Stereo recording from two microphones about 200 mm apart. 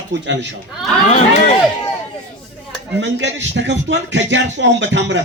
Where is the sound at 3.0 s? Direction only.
65° right (ahead or behind).